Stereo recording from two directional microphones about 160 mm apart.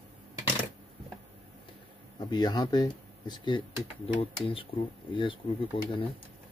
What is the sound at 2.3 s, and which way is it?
Speech, 25° left (ahead or behind).